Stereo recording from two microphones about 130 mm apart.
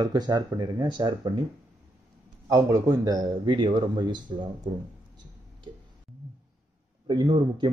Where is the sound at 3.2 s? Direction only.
40° right (ahead or behind).